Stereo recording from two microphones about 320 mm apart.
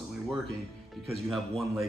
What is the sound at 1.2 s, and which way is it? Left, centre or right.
Speech, centre.